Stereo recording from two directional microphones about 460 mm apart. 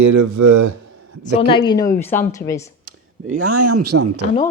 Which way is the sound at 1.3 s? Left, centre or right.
Centre.